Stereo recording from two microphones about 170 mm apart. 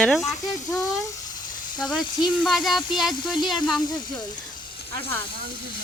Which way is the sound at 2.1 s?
25° left (ahead or behind).